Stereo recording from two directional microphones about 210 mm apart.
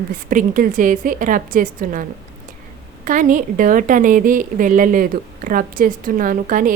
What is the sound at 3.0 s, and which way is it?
A woman's voice, 40° right (ahead or behind).